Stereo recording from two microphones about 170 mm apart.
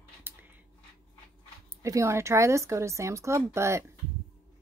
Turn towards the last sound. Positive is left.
turn(degrees=-15)  # may be behind; listen again after turning